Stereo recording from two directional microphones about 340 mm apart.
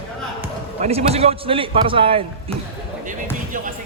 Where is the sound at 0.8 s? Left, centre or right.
Centre.